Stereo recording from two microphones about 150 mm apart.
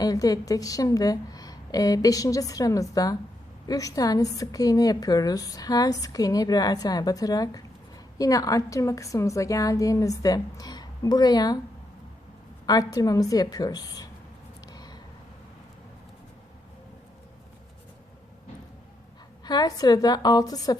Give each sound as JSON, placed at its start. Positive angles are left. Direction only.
{"t": 0.0, "sound": "a woman's voice", "side_deg": 25}
{"t": 12.6, "sound": "a woman's voice", "side_deg": 25}
{"t": 14.7, "sound": "a sound", "side_deg": 25}
{"t": 19.5, "sound": "a woman's voice", "side_deg": 25}